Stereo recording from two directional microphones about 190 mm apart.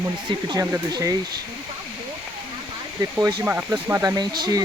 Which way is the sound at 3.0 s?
15° right (ahead or behind).